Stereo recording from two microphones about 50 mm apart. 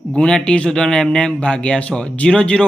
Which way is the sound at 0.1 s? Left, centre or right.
Centre.